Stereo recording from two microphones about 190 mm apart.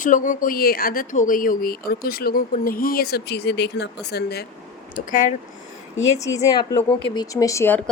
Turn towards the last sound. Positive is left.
turn(degrees=15)  # may be behind; listen again after turning